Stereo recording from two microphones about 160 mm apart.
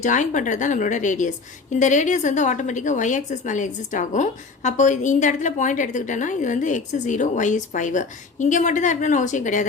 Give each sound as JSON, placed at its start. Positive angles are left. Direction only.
{"t": 0.0, "sound": "a woman's voice", "side_deg": 50}